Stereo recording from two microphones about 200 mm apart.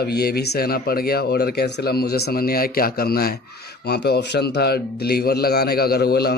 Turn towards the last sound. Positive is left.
turn(degrees=50)  # may be behind; listen again after turning